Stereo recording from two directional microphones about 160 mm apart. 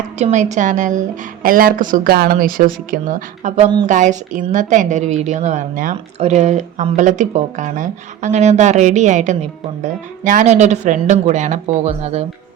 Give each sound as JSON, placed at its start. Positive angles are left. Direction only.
{"t": 0.2, "sound": "a woman's voice", "side_deg": -45}
{"t": 6.1, "sound": "speech", "side_deg": -45}